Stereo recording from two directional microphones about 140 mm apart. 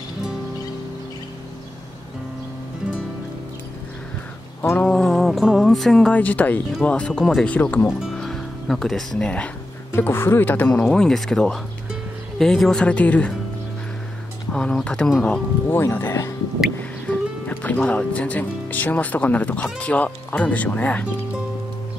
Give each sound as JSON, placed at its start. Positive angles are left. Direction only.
{"t": 4.6, "sound": "music", "side_deg": 15}
{"t": 4.8, "sound": "speech", "side_deg": 5}
{"t": 8.0, "sound": "speech", "side_deg": 0}
{"t": 14.5, "sound": "speech", "side_deg": 5}